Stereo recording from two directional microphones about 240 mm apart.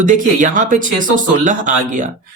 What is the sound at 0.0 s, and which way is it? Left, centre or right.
Speech, right.